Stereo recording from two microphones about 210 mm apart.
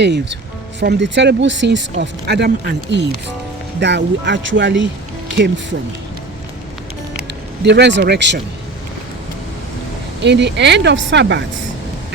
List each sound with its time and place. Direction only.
0.0 s speech: 55° right (ahead or behind)
7.2 s speech: 55° right (ahead or behind)
10.2 s speech: 55° right (ahead or behind)